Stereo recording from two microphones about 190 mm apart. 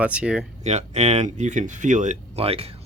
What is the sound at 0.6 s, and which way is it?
Speech, 35° right (ahead or behind).